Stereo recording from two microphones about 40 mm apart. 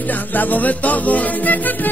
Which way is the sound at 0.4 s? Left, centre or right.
Left.